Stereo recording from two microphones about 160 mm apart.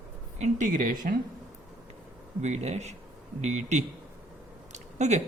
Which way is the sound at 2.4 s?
45° right (ahead or behind).